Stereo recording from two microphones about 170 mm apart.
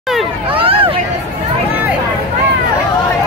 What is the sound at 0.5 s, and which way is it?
Hubbub, 35° right (ahead or behind).